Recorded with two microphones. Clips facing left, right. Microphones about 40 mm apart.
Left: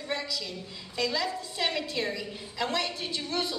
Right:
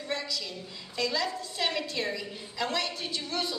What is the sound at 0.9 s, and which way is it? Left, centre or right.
A woman's voice, centre.